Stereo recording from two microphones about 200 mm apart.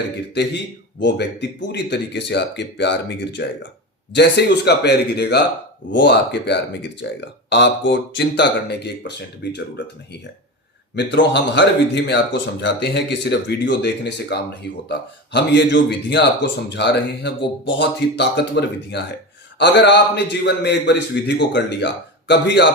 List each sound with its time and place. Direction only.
0.3 s speech: 60° left (ahead or behind)